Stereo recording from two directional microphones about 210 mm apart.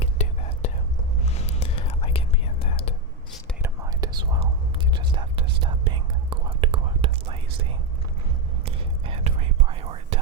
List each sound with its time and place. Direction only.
0.0 s whispering: 30° left (ahead or behind)
3.6 s whispering: 15° right (ahead or behind)
8.6 s whispering: 25° right (ahead or behind)